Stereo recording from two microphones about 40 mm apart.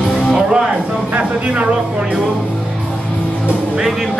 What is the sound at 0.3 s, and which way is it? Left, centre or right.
Music, right.